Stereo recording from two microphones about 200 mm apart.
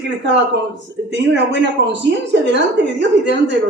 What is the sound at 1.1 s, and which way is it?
A woman's voice, 60° right (ahead or behind).